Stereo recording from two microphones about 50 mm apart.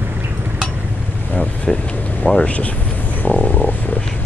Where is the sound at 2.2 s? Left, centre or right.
Left.